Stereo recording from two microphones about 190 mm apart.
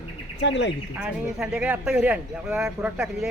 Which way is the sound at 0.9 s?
5° right (ahead or behind).